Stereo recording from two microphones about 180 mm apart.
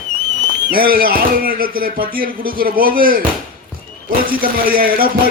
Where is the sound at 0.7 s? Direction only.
55° right (ahead or behind).